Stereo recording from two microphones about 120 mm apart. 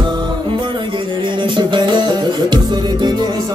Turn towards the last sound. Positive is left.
turn(degrees=-35)  # may be behind; listen again after turning